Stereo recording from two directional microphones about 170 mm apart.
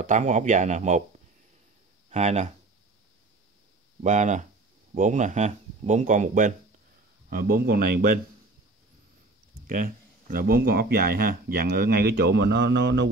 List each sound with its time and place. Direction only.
0.0 s speech: 45° right (ahead or behind)
2.0 s speech: 40° right (ahead or behind)
4.0 s speech: 45° right (ahead or behind)
7.2 s speech: 60° right (ahead or behind)
9.7 s speech: 55° right (ahead or behind); by 13.1 s 90° right